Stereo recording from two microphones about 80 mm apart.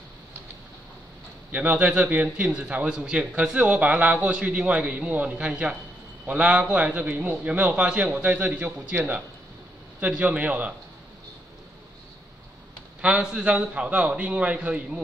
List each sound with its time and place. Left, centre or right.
1.5 s a man's voice: centre
13.0 s a man's voice: centre